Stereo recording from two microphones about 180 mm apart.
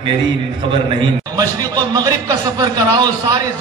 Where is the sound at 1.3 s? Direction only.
20° right (ahead or behind).